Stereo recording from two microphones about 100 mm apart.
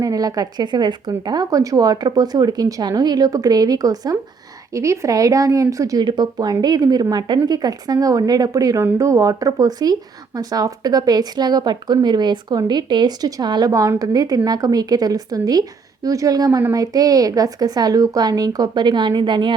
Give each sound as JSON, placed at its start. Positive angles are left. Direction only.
{"t": 0.0, "sound": "a woman's voice", "side_deg": -35}
{"t": 16.5, "sound": "speech", "side_deg": -20}
{"t": 16.7, "sound": "a woman's voice", "side_deg": -40}